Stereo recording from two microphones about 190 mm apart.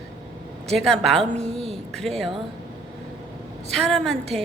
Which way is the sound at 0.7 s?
5° left (ahead or behind).